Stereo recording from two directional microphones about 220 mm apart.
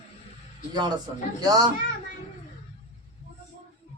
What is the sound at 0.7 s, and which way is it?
Speech, 20° right (ahead or behind).